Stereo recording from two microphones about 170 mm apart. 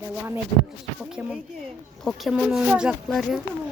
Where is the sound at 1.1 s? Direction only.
5° right (ahead or behind).